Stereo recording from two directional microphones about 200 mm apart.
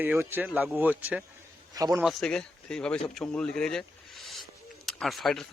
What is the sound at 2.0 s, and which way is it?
Speech, centre (ahead or behind).